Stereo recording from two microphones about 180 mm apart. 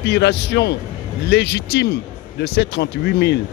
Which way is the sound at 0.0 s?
65° left (ahead or behind).